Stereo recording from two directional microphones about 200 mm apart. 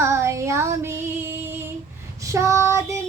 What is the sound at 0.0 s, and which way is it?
Child singing, 15° right (ahead or behind).